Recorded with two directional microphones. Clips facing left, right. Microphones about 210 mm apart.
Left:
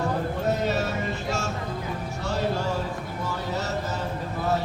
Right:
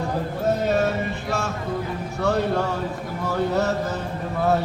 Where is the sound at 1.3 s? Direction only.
60° right (ahead or behind).